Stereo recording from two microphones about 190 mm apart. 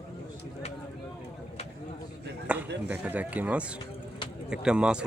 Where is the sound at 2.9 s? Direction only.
10° right (ahead or behind).